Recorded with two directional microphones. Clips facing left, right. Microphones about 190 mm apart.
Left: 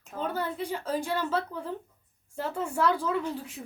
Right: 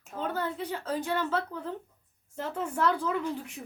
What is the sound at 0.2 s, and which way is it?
Speech, 10° left (ahead or behind).